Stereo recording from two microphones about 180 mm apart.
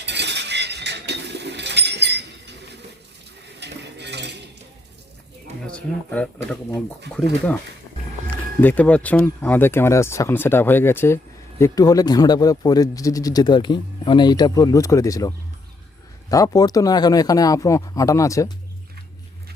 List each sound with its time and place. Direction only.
0.0 s chink: 70° right (ahead or behind)
3.6 s cutlery: 70° right (ahead or behind)
5.6 s speech: 5° left (ahead or behind)
8.6 s speech: 10° left (ahead or behind)
16.3 s speech: 20° left (ahead or behind)